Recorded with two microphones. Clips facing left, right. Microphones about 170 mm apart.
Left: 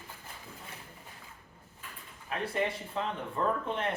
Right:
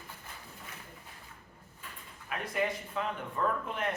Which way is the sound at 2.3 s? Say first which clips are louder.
Left 1 dB; 30° left (ahead or behind).